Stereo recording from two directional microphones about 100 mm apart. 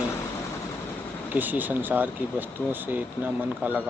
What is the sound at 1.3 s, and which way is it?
Speech, 20° right (ahead or behind).